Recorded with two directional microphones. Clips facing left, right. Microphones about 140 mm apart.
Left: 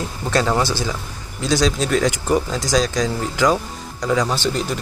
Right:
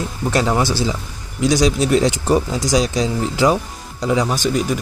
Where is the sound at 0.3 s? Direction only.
20° right (ahead or behind).